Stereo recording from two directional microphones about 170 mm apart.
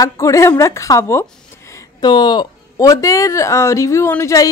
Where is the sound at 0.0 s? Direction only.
20° left (ahead or behind).